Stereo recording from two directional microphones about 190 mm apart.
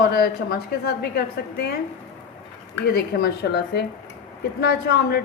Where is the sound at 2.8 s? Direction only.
55° left (ahead or behind).